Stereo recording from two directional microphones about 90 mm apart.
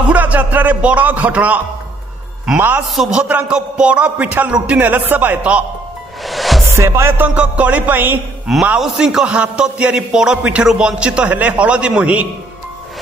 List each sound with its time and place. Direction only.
0.1 s a man's voice: 15° right (ahead or behind)
2.9 s a man's voice: 5° right (ahead or behind)
6.2 s music: centre (ahead or behind)
6.7 s music: 30° right (ahead or behind)
7.3 s a man's voice: 15° right (ahead or behind)
8.7 s a man's voice: 5° right (ahead or behind)